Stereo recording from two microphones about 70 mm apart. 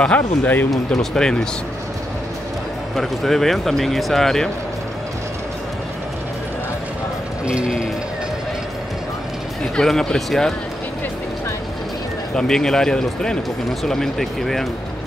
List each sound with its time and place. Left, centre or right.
0.0 s speech: centre
0.9 s speech: centre
3.0 s speech: centre
7.4 s music: centre
9.8 s speech: centre
12.4 s speech: centre